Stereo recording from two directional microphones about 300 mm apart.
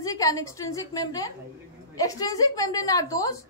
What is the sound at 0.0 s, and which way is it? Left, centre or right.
A woman's voice, centre.